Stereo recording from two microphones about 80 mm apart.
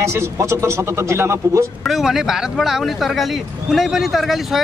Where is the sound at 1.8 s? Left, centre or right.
Centre.